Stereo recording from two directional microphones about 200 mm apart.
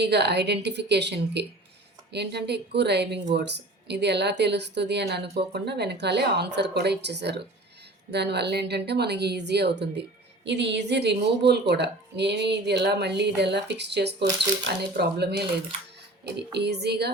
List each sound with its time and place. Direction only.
0.0 s a woman's voice: 55° right (ahead or behind)